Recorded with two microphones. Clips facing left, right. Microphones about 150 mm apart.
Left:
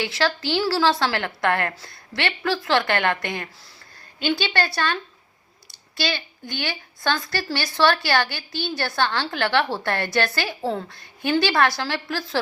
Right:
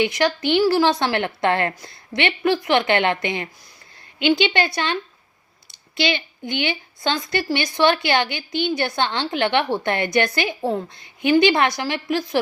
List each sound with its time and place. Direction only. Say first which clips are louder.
0.0 s a woman's voice: right 4 dB; 20° right (ahead or behind)